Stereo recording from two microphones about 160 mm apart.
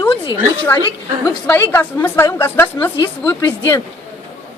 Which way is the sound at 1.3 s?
15° left (ahead or behind).